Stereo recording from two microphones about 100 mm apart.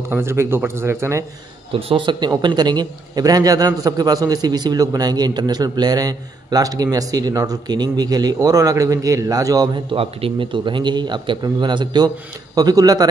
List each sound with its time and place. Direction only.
0.1 s a man's voice: 25° right (ahead or behind)
1.7 s a man's voice: 70° right (ahead or behind); by 9.7 s 40° right (ahead or behind)
9.9 s a man's voice: 65° right (ahead or behind); by 13.0 s 40° right (ahead or behind)